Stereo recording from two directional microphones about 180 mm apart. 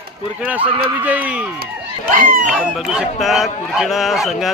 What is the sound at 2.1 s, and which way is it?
Speech, 50° right (ahead or behind).